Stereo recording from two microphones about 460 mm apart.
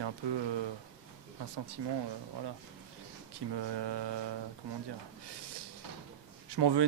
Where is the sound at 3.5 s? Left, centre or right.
Right.